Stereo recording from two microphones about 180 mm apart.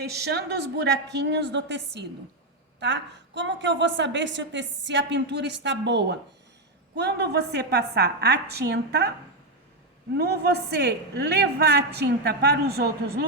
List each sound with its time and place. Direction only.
0.0 s a woman's voice: 65° right (ahead or behind)
10.2 s a woman's voice: 65° right (ahead or behind)